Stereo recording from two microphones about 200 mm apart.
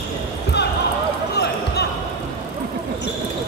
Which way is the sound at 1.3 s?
55° left (ahead or behind).